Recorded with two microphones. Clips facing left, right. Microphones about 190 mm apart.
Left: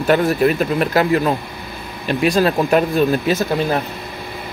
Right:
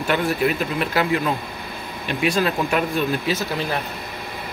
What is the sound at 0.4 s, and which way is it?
Speech, 40° left (ahead or behind).